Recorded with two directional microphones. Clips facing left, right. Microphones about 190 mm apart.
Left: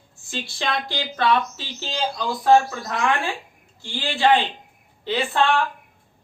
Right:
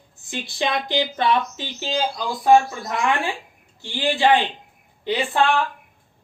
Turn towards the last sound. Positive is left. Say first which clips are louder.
# right 1 dB
turn(degrees=-15)  # may be behind; listen again after turning